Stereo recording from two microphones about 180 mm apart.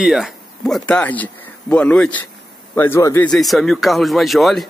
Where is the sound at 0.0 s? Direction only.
Centre (ahead or behind); by 3.3 s 15° left (ahead or behind).